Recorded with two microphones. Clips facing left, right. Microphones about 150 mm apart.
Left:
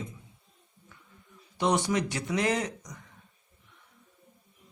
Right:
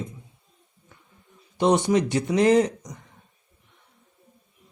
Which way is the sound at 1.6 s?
25° right (ahead or behind).